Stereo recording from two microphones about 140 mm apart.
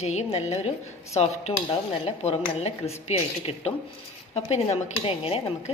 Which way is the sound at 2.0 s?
50° left (ahead or behind).